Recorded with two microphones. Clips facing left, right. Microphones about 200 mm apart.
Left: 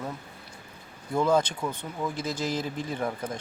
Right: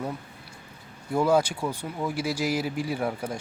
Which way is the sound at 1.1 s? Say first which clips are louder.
Right 2 dB; 10° right (ahead or behind).